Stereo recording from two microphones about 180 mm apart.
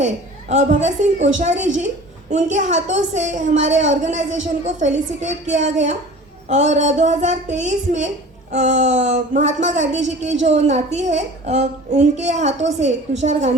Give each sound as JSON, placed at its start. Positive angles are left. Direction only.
{"t": 0.0, "sound": "a woman's voice", "side_deg": -40}
{"t": 9.4, "sound": "speech", "side_deg": -90}
{"t": 9.6, "sound": "a woman's voice", "side_deg": -40}